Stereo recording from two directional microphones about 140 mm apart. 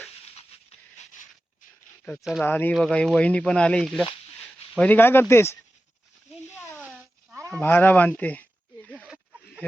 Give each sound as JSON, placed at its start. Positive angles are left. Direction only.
{"t": 2.1, "sound": "speech", "side_deg": -5}
{"t": 2.4, "sound": "speech", "side_deg": 15}
{"t": 4.8, "sound": "speech", "side_deg": 15}
{"t": 7.5, "sound": "speech", "side_deg": 15}